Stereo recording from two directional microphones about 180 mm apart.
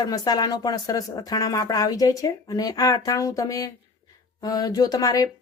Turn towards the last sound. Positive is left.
turn(degrees=20)  # may be behind; listen again after turning